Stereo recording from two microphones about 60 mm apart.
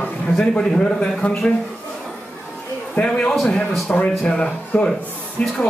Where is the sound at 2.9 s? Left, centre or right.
Centre.